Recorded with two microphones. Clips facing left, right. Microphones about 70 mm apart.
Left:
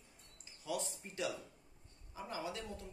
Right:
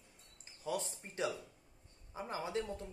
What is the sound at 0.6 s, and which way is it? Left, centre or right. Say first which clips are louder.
Speech: right 2 dB; right.